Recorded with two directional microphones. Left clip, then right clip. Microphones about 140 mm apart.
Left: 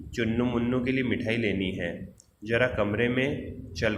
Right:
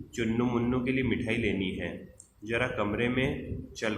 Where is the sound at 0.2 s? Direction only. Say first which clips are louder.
Left 2 dB; 20° left (ahead or behind).